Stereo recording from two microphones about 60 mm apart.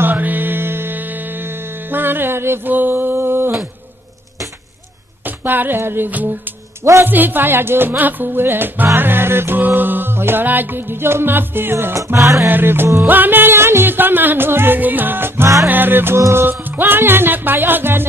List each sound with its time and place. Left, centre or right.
0.0 s music: right
5.2 s a sound: right
6.0 s music: right
6.8 s speech: right
7.1 s music: right
11.9 s music: right
12.4 s music: right
16.2 s music: right
16.4 s music: right